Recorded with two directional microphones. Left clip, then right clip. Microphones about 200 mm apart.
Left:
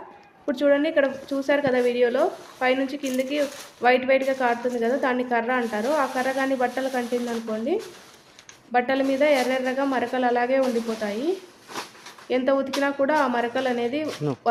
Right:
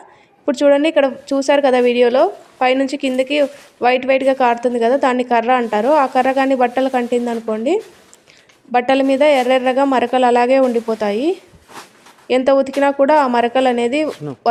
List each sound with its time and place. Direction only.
0.4 s a woman's voice: 35° right (ahead or behind)
12.3 s a woman's voice: 35° right (ahead or behind)